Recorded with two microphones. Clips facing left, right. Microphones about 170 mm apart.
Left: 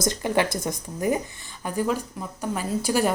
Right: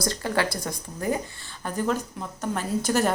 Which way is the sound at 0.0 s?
20° left (ahead or behind).